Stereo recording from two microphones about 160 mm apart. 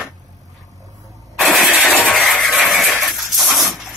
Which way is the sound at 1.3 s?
Centre (ahead or behind).